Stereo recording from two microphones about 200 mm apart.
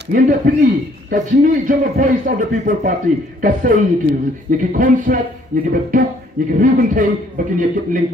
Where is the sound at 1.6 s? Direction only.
45° right (ahead or behind).